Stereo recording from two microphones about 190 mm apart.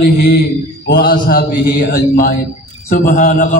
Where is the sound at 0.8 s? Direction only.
55° left (ahead or behind).